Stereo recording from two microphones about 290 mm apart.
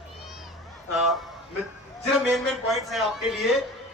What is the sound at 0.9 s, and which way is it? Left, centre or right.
Speech, centre.